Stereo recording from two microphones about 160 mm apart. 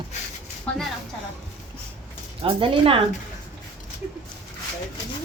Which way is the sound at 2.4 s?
35° right (ahead or behind).